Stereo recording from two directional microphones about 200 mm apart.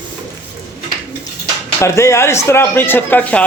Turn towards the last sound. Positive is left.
turn(degrees=5)  # may be behind; listen again after turning